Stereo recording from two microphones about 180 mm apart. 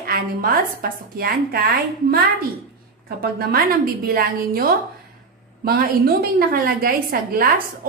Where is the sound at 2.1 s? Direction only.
55° right (ahead or behind).